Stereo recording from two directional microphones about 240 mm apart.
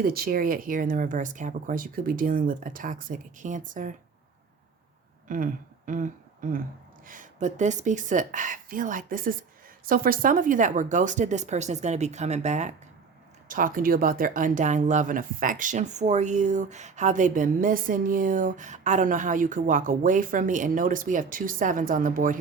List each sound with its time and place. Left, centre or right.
0.0 s speech: right
5.3 s a sound: right
7.1 s speech: right